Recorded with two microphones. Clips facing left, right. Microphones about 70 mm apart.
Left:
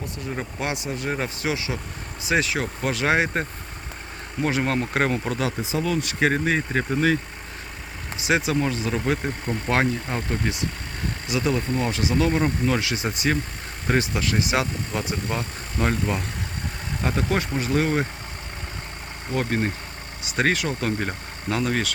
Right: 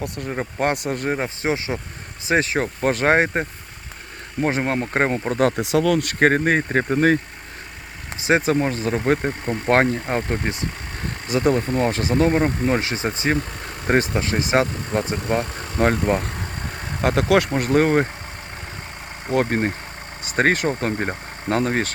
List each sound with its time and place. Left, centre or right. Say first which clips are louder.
0.2 s speech: right 6 dB; right
1.1 s speech: right 3 dB; right
4.6 s speech: right 2 dB; right
5.5 s speech: right 6 dB; right
8.2 s speech: right 4 dB; right
13.8 s speech: right 4 dB; right
19.3 s speech: right 5 dB; right